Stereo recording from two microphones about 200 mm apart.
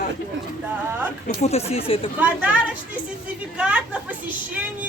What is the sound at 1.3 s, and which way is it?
Speech, 30° left (ahead or behind).